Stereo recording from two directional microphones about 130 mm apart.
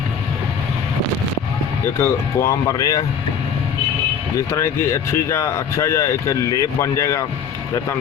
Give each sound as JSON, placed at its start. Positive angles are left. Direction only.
{"t": 2.0, "sound": "speech", "side_deg": 25}
{"t": 4.4, "sound": "speech", "side_deg": 20}